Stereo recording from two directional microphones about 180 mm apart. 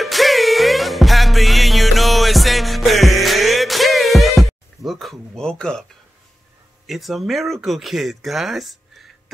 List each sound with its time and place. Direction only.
0.0 s music: centre (ahead or behind)
6.9 s speech: centre (ahead or behind)